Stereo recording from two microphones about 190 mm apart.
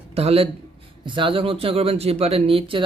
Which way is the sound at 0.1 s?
30° right (ahead or behind).